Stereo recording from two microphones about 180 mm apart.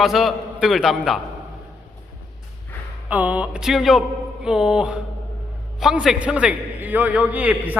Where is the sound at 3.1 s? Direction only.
10° right (ahead or behind).